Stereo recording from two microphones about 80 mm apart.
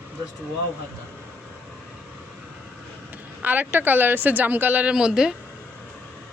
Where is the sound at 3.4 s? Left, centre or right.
Right.